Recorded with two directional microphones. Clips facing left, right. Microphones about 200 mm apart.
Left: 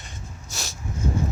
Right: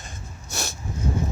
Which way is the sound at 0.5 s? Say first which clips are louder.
Right 5 dB; 60° right (ahead or behind).